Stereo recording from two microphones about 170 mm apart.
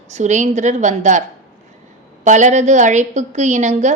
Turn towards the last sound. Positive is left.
turn(degrees=-45)  # may be behind; listen again after turning